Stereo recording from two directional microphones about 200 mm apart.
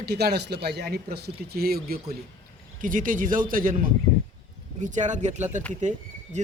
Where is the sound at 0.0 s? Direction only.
55° right (ahead or behind).